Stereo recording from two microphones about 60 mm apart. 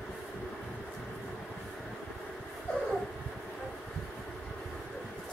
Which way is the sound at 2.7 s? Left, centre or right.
Centre.